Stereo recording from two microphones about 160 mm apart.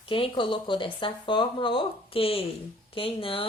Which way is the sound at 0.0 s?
35° left (ahead or behind).